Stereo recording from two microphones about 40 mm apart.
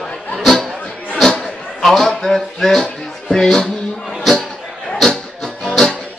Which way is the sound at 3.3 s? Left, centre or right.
Centre.